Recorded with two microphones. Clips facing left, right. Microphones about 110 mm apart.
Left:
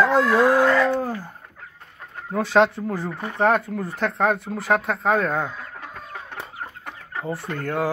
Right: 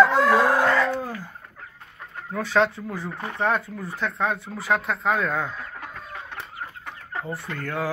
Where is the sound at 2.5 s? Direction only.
30° left (ahead or behind).